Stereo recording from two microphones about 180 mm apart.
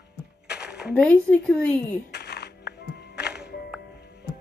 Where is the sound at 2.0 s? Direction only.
65° left (ahead or behind).